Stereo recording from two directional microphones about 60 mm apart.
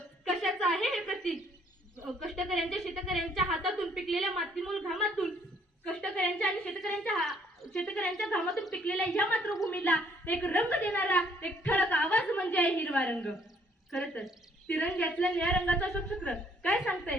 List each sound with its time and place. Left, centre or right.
0.3 s a sound: centre
2.0 s a woman's voice: centre
7.9 s a woman's voice: centre
8.4 s a woman's voice: centre
8.7 s a woman's voice: left
9.5 s a woman's voice: centre
9.7 s a woman's voice: left
14.9 s a woman's voice: centre
15.5 s a woman's voice: centre